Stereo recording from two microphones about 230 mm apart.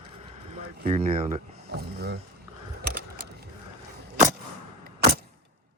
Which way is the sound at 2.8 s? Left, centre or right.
Right.